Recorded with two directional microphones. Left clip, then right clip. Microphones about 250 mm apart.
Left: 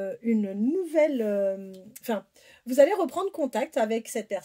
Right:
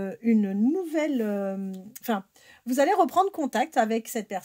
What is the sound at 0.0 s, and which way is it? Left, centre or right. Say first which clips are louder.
Speech: right 2 dB; right.